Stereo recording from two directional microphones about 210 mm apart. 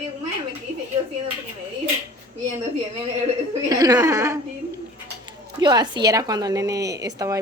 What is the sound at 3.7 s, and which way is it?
Speech, 15° right (ahead or behind).